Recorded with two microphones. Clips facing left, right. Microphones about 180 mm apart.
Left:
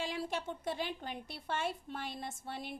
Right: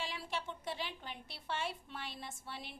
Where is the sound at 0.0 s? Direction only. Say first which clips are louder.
Left 5 dB; 45° left (ahead or behind).